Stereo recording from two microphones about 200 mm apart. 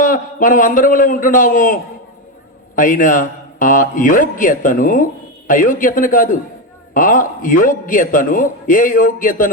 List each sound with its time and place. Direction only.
0.0 s a man's voice: 40° left (ahead or behind)